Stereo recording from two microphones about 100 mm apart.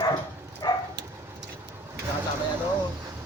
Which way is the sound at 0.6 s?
40° left (ahead or behind).